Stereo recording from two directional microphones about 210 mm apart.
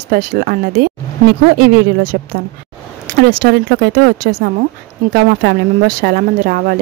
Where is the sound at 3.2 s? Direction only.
50° right (ahead or behind).